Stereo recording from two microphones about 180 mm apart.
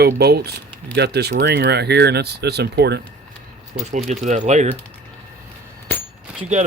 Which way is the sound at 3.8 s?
40° right (ahead or behind).